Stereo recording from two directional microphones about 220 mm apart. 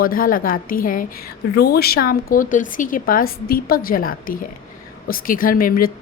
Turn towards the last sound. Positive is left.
turn(degrees=40)  # may be behind; listen again after turning